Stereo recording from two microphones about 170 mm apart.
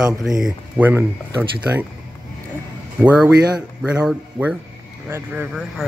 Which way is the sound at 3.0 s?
5° right (ahead or behind).